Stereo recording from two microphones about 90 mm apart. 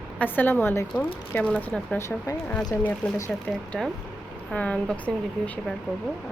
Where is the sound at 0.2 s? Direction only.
20° left (ahead or behind).